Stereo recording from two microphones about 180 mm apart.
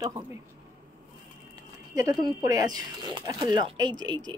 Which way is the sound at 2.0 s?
20° right (ahead or behind).